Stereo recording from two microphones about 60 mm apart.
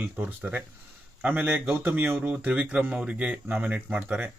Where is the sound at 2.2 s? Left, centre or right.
Right.